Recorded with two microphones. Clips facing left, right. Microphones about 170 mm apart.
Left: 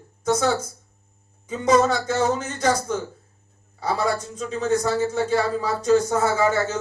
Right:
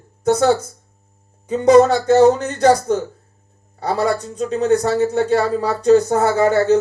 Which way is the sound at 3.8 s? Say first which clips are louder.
Right 5 dB; 60° right (ahead or behind).